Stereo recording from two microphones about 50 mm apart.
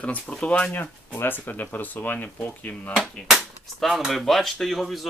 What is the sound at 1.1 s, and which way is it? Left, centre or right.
Speech, left.